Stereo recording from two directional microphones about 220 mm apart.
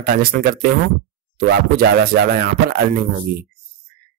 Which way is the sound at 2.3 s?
40° right (ahead or behind).